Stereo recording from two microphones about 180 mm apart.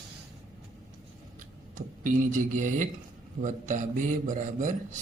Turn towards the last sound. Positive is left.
turn(degrees=-45)  # may be behind; listen again after turning